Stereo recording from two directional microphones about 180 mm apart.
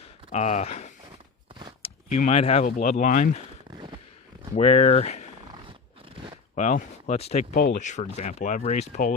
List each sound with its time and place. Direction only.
0.3 s speech: 40° left (ahead or behind)
4.5 s speech: 35° left (ahead or behind)
6.6 s speech: 45° left (ahead or behind)
7.5 s speech: 50° left (ahead or behind)